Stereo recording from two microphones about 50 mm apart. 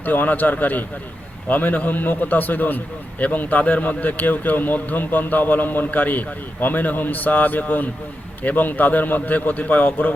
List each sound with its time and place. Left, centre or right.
0.0 s a man's voice: left